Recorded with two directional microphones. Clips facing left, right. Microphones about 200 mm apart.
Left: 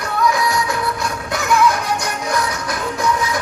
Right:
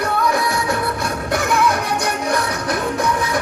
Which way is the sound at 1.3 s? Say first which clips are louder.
Left 2 dB; 55° right (ahead or behind).